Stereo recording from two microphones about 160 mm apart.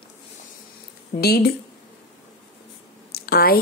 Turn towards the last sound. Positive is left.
turn(degrees=70)  # may be behind; listen again after turning